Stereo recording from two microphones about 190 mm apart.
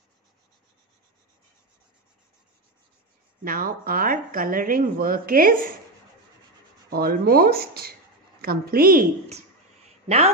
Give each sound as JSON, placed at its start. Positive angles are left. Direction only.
{"t": 3.4, "sound": "speech", "side_deg": -50}
{"t": 6.9, "sound": "speech", "side_deg": -50}
{"t": 10.0, "sound": "speech", "side_deg": -35}